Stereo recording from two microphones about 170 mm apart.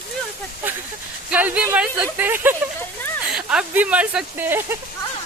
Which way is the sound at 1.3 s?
10° right (ahead or behind).